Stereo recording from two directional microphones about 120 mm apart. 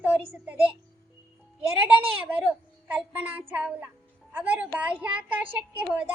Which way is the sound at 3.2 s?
15° right (ahead or behind).